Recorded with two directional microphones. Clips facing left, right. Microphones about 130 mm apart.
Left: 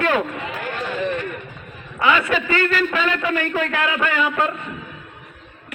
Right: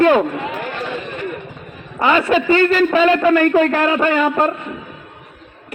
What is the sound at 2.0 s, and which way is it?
A man's voice, 35° right (ahead or behind).